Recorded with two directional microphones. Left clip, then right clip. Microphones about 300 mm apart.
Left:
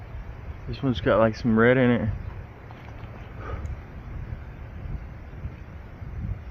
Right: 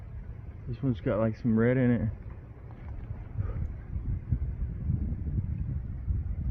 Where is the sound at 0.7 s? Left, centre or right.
Centre.